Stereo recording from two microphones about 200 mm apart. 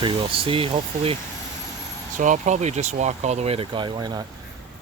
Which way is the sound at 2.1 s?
40° right (ahead or behind).